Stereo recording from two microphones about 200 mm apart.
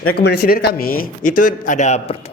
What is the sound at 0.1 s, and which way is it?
A man's voice, 50° left (ahead or behind).